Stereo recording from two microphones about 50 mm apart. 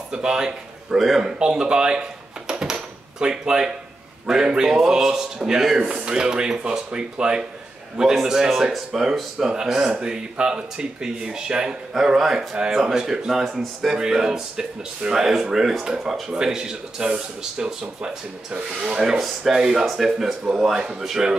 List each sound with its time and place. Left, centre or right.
0.1 s speech: centre
1.4 s a sound: centre
4.3 s speech: centre